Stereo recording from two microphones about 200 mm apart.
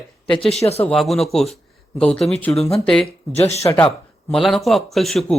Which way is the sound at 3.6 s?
15° left (ahead or behind).